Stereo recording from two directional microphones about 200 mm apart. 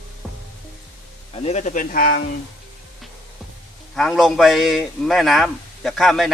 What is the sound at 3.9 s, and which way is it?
A man's voice, centre (ahead or behind).